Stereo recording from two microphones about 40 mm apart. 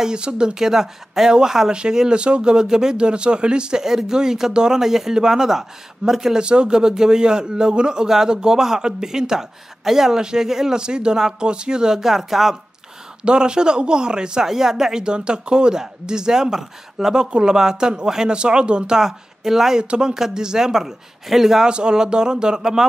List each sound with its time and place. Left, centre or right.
0.0 s speech: right
0.6 s speech: centre
6.4 s speech: right
12.0 s speech: centre
13.2 s speech: right
14.4 s speech: centre
18.9 s speech: centre
19.8 s speech: right; by 21.6 s centre
21.6 s speech: right